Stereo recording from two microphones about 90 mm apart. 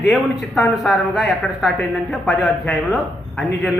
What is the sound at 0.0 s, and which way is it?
Speech, centre (ahead or behind).